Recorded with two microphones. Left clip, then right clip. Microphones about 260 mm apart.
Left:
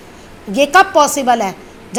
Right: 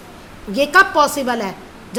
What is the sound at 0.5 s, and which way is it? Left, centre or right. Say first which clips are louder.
A woman's voice: left 3 dB; centre.